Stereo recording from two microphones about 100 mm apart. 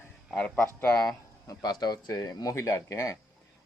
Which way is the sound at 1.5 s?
40° left (ahead or behind).